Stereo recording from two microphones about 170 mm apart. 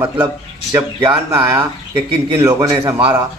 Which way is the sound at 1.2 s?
15° right (ahead or behind).